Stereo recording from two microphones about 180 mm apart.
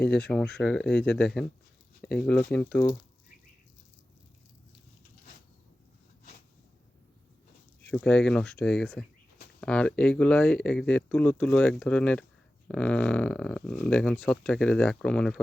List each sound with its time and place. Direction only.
0.1 s speech: 5° left (ahead or behind)
7.8 s speech: 5° left (ahead or behind)